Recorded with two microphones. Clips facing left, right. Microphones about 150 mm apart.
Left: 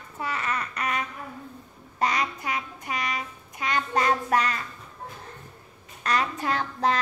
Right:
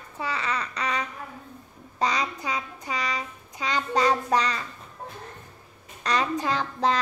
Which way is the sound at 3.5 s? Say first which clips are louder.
Even; 20° right (ahead or behind).